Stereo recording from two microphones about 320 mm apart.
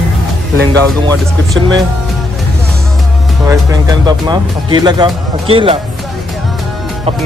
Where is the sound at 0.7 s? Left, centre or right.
Centre.